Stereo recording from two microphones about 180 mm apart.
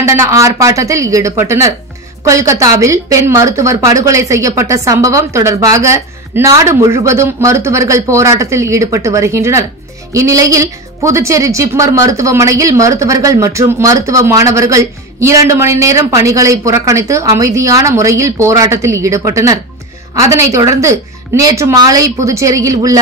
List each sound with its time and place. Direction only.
0.0 s a woman's voice: 15° right (ahead or behind)